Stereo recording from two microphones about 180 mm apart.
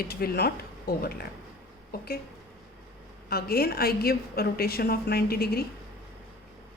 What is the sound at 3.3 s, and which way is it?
A woman's voice, 60° left (ahead or behind).